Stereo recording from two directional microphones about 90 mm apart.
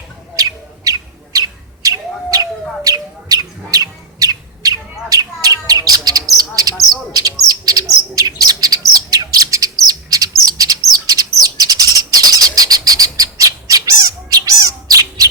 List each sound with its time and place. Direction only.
0.9 s bird: 40° right (ahead or behind)